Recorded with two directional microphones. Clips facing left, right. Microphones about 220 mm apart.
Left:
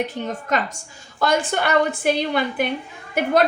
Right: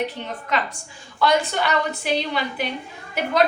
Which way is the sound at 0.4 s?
45° left (ahead or behind).